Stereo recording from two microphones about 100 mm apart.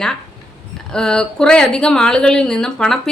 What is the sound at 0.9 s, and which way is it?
A woman's voice, 5° left (ahead or behind).